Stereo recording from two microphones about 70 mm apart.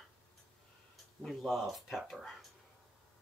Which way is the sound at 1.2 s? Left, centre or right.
Centre.